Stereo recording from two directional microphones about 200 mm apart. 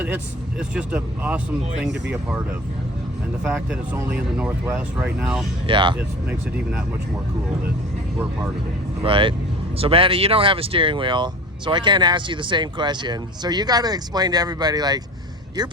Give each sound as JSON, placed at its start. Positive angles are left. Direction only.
{"t": 0.7, "sound": "speech", "side_deg": -5}
{"t": 3.4, "sound": "speech", "side_deg": -10}
{"t": 5.6, "sound": "speech", "side_deg": -25}
{"t": 9.0, "sound": "speech", "side_deg": -25}